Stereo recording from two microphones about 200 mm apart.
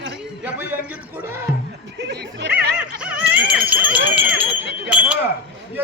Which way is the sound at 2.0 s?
60° right (ahead or behind).